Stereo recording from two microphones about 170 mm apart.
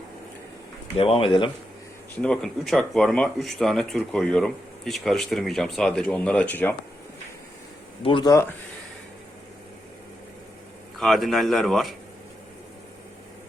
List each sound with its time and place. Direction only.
0.9 s speech: 35° left (ahead or behind)
2.2 s speech: 5° left (ahead or behind)
8.0 s a man's voice: 25° left (ahead or behind)
10.9 s speech: centre (ahead or behind)